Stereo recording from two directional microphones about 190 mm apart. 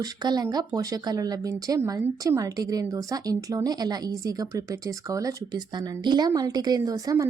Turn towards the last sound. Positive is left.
turn(degrees=-20)  # may be behind; listen again after turning